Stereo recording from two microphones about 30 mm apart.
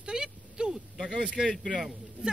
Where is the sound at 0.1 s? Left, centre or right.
Right.